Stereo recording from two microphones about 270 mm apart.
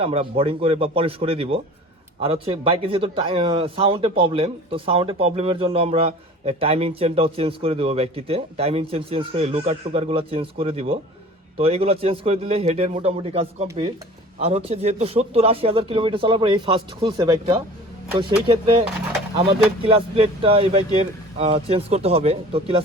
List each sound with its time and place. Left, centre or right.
0.0 s speech: right